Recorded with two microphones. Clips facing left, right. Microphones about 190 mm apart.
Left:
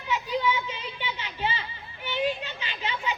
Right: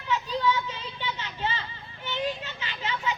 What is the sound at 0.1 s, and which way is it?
Children playing, 15° left (ahead or behind).